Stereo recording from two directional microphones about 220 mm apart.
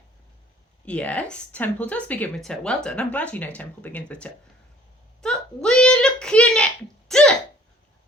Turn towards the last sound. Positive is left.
turn(degrees=5)  # may be behind; listen again after turning